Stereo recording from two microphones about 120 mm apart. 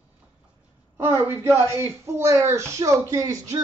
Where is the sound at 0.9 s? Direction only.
20° right (ahead or behind).